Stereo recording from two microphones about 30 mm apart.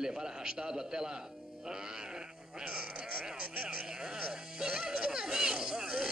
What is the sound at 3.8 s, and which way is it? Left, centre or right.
Music, right.